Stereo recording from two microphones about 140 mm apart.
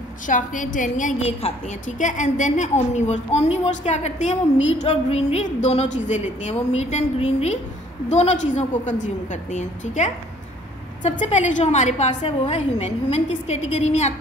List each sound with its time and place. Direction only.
0.3 s a woman's voice: 70° left (ahead or behind)
1.2 s a woman's voice: 55° left (ahead or behind)